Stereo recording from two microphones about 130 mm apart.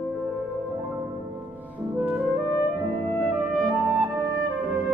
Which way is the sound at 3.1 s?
5° left (ahead or behind).